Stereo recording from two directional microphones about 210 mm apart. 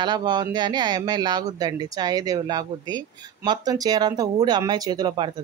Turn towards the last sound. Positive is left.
turn(degrees=-20)  # may be behind; listen again after turning